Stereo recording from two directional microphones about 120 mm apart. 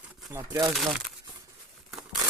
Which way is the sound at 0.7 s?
Centre (ahead or behind).